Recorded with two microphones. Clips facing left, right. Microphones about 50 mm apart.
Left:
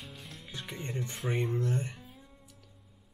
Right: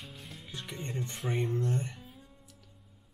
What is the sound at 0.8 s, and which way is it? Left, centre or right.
Speech, centre.